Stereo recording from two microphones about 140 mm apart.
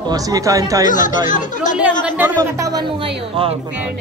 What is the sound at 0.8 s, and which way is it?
Speech, 65° left (ahead or behind).